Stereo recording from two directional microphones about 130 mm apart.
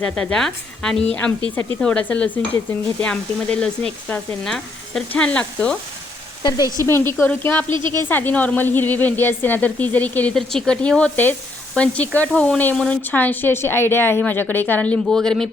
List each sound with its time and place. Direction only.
0.0 s speech: 5° left (ahead or behind)
6.4 s frying: 30° left (ahead or behind)
6.8 s a woman's voice: 20° left (ahead or behind)
7.7 s speech: 40° right (ahead or behind)
8.0 s speech: 15° left (ahead or behind)